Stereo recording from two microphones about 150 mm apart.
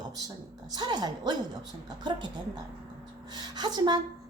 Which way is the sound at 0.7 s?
25° right (ahead or behind).